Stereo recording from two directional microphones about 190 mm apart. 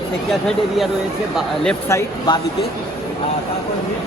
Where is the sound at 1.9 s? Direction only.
20° left (ahead or behind).